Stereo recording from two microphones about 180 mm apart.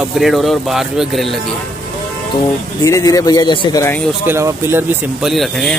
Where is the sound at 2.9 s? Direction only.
20° left (ahead or behind).